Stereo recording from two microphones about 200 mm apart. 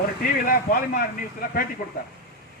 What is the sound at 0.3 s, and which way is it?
Speech, 45° left (ahead or behind).